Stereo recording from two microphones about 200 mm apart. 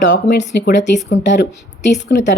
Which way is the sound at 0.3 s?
50° left (ahead or behind).